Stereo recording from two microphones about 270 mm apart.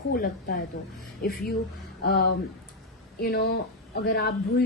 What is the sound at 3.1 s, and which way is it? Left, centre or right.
A woman's voice, left.